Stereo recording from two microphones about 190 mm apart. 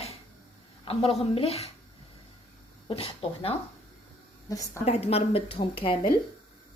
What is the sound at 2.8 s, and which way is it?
Speech, 30° left (ahead or behind).